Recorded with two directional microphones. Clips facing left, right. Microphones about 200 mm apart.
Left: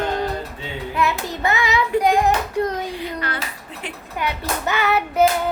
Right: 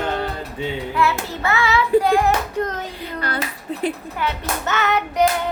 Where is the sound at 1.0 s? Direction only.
15° left (ahead or behind).